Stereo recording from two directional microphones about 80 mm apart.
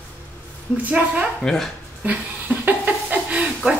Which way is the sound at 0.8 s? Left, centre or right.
Centre.